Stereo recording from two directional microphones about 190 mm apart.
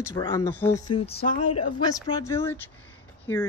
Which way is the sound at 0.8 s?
30° left (ahead or behind).